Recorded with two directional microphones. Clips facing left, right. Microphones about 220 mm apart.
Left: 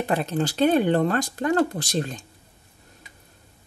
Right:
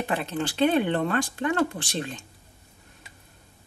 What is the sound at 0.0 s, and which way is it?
A woman's voice, 40° left (ahead or behind).